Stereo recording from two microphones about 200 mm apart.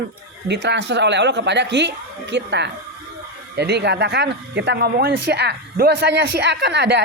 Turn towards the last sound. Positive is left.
turn(degrees=-60)  # may be behind; listen again after turning